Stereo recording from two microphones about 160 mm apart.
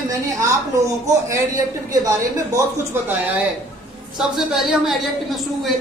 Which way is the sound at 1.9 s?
20° right (ahead or behind).